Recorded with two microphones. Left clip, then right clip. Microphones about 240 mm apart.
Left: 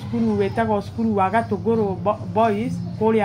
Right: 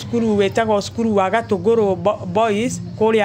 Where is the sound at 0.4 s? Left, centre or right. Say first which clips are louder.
Right 4 dB; right.